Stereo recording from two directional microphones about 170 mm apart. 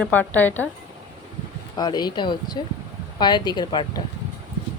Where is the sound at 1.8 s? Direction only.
25° left (ahead or behind).